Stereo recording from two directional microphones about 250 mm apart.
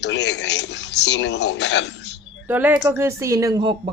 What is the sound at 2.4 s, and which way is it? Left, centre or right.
Speech, centre.